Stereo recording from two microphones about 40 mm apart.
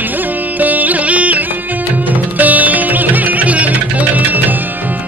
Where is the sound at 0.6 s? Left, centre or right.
Right.